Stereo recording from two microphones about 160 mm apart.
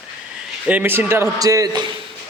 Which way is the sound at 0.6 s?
10° right (ahead or behind).